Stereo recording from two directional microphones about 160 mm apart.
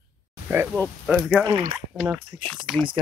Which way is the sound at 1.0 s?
5° right (ahead or behind).